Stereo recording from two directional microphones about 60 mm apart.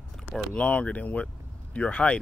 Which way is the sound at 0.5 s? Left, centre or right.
Left.